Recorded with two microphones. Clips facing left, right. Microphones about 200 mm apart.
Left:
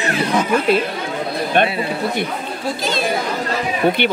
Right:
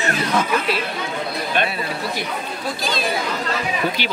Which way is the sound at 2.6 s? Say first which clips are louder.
Left 4 dB; 25° left (ahead or behind).